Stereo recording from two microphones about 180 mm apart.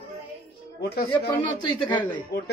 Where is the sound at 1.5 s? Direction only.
25° left (ahead or behind).